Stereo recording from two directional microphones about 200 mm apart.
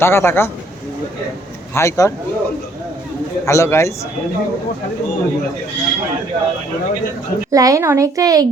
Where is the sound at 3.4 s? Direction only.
15° left (ahead or behind).